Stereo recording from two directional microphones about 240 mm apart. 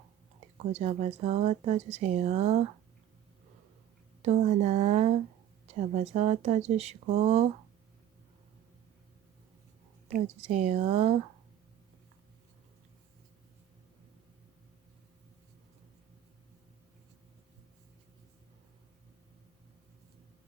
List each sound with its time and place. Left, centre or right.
0.7 s speech: right
4.2 s speech: right
10.1 s speech: right